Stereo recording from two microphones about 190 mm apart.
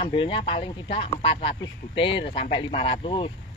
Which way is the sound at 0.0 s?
30° left (ahead or behind).